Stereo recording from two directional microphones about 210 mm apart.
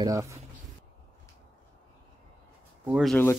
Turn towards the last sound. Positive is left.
turn(degrees=10)  # may be behind; listen again after turning